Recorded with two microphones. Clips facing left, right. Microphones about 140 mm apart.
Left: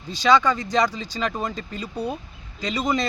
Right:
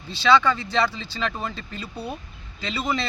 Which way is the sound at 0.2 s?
15° left (ahead or behind).